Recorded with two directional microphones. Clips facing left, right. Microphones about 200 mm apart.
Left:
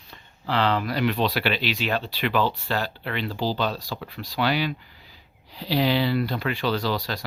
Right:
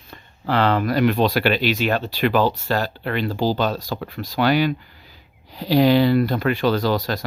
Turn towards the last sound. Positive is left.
turn(degrees=-45)  # may be behind; listen again after turning